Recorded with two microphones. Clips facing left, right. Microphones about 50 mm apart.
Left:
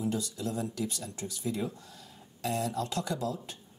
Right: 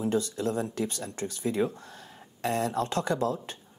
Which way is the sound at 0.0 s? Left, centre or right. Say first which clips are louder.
Right 5 dB; right.